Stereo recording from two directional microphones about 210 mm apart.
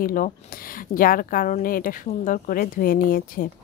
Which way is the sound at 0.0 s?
40° left (ahead or behind).